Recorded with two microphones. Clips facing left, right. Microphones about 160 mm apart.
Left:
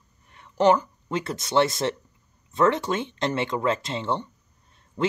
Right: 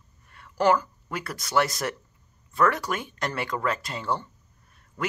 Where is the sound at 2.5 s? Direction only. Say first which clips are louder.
Left 3 dB; 25° left (ahead or behind).